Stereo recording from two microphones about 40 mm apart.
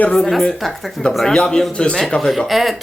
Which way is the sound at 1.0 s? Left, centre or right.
Left.